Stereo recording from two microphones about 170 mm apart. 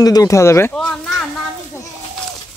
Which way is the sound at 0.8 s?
5° left (ahead or behind).